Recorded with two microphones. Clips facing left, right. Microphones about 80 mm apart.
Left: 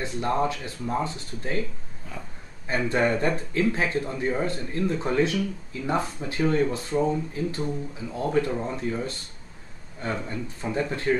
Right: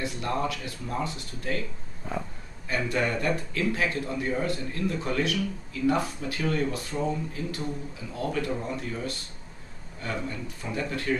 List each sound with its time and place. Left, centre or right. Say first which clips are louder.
0.0 s speech: left 4 dB; left
2.7 s speech: left 4 dB; left